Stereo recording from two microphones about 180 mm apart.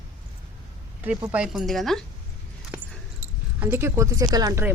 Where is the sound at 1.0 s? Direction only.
10° right (ahead or behind).